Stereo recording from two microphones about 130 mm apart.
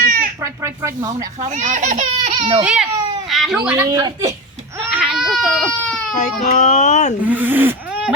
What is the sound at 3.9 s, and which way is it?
Speech, 30° right (ahead or behind).